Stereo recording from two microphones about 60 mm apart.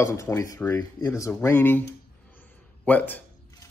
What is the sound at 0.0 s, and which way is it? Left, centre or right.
Speech, left.